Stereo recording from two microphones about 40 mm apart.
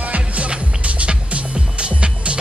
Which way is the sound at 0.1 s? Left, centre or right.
Right.